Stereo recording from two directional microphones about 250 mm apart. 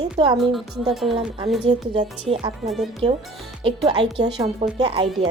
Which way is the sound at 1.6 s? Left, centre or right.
Centre.